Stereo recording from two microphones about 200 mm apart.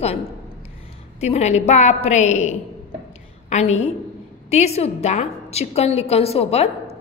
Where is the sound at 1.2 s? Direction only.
35° left (ahead or behind).